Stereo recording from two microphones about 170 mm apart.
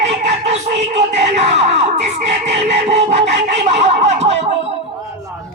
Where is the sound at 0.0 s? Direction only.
40° right (ahead or behind).